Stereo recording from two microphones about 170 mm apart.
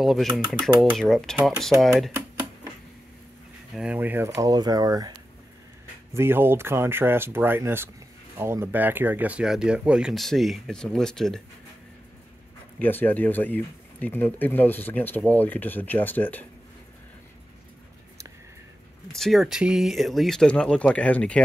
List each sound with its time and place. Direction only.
0.0 s speech: centre (ahead or behind)
3.7 s speech: 5° right (ahead or behind); by 5.1 s 20° right (ahead or behind)
6.1 s speech: 15° right (ahead or behind); by 11.4 s 5° left (ahead or behind)
12.7 s speech: 10° left (ahead or behind)
19.1 s speech: centre (ahead or behind)